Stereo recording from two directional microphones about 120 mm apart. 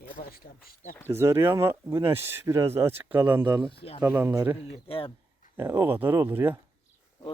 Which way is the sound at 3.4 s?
35° right (ahead or behind).